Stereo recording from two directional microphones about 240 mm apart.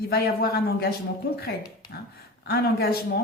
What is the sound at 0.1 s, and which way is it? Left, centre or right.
A woman's voice, left.